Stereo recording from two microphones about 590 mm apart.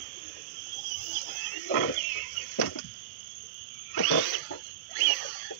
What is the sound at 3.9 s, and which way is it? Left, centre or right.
Wild animals, left.